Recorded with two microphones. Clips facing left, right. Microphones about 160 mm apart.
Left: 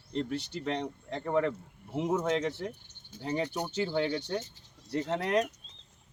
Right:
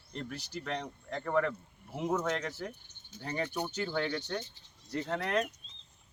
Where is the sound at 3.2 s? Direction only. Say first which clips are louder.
Left 3 dB; 15° left (ahead or behind).